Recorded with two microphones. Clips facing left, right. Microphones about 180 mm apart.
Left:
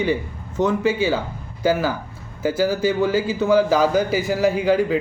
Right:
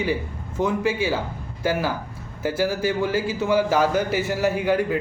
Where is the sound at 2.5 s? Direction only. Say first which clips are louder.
Left 3 dB; 10° right (ahead or behind).